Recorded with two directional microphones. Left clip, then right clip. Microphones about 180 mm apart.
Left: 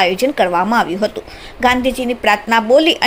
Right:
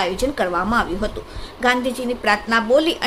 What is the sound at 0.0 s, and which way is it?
A woman's voice, 25° left (ahead or behind).